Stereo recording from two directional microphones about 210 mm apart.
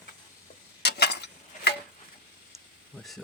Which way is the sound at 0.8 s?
55° left (ahead or behind).